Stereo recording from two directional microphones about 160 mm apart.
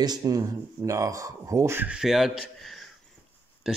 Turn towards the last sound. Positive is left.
turn(degrees=-5)  # may be behind; listen again after turning